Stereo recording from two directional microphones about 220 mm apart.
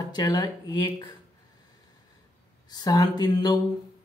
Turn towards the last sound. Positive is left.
turn(degrees=20)  # may be behind; listen again after turning